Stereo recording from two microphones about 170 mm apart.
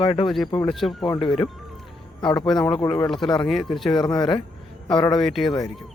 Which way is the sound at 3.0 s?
Centre (ahead or behind).